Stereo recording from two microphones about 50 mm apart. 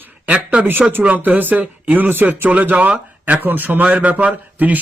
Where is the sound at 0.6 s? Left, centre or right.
Right.